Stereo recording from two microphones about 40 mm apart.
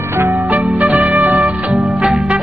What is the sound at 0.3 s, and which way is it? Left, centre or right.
Music, right.